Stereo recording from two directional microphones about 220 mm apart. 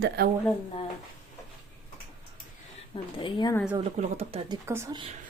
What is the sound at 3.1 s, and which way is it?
Speech, 20° left (ahead or behind).